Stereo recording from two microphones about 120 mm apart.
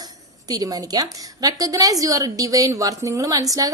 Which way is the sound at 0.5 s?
30° right (ahead or behind).